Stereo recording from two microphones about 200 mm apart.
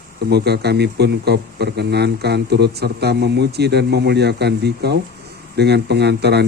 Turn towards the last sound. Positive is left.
turn(degrees=-55)  # may be behind; listen again after turning